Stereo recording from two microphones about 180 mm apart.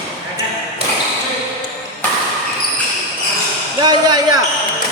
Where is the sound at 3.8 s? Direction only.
20° right (ahead or behind).